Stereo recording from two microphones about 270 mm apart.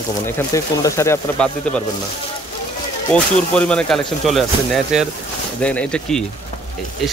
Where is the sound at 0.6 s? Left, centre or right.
Centre.